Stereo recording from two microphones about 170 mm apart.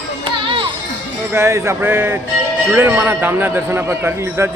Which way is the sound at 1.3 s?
15° right (ahead or behind).